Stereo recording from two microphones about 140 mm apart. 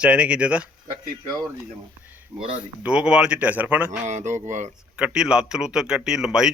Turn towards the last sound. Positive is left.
turn(degrees=-5)  # may be behind; listen again after turning